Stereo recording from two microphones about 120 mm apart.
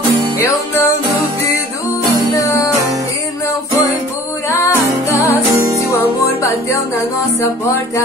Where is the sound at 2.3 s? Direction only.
25° left (ahead or behind).